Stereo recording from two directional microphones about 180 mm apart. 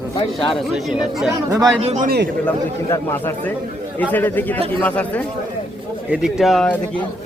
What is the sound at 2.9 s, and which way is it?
Speech, 10° left (ahead or behind).